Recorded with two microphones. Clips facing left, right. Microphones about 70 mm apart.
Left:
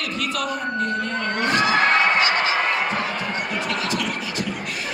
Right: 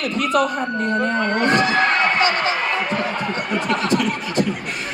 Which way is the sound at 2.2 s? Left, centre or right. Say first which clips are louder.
Right 1 dB; right.